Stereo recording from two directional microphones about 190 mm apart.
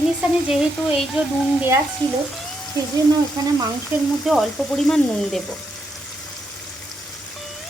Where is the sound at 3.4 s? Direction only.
20° right (ahead or behind).